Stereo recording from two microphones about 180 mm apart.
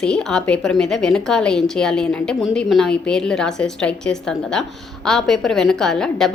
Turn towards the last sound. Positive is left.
turn(degrees=5)  # may be behind; listen again after turning